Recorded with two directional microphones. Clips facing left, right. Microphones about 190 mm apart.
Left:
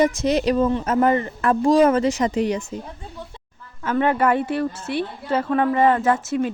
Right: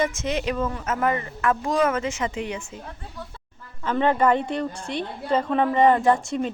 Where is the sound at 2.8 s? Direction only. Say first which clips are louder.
Left 2 dB; 15° left (ahead or behind).